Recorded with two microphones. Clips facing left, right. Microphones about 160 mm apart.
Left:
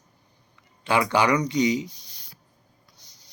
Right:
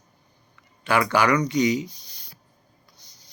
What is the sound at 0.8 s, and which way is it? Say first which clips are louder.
Speech: right 1 dB; 20° left (ahead or behind).